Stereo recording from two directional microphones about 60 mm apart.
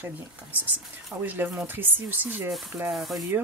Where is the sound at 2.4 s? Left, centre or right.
Centre.